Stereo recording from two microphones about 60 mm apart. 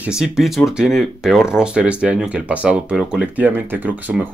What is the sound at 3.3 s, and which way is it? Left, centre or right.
Speech, right.